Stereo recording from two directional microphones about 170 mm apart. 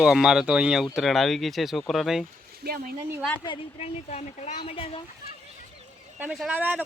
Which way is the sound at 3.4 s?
35° left (ahead or behind).